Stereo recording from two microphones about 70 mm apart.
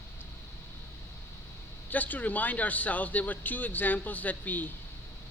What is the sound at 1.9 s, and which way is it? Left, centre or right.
Speech, left.